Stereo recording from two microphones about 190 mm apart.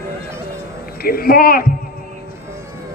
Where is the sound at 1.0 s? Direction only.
50° left (ahead or behind).